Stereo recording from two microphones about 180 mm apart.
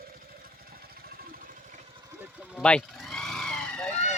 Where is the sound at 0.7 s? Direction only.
55° right (ahead or behind).